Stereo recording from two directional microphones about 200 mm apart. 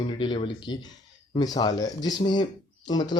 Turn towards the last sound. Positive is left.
turn(degrees=20)  # may be behind; listen again after turning